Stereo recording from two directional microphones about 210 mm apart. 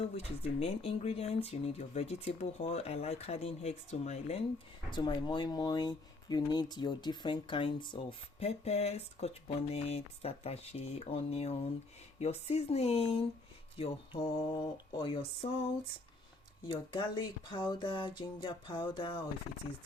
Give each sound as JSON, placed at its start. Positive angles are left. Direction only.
{"t": 0.0, "sound": "speech", "side_deg": 30}
{"t": 4.9, "sound": "speech", "side_deg": 20}
{"t": 16.6, "sound": "speech", "side_deg": 25}